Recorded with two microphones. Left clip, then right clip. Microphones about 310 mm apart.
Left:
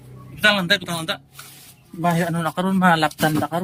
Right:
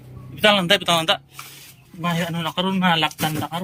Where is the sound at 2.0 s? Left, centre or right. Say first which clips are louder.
Left 3 dB; centre.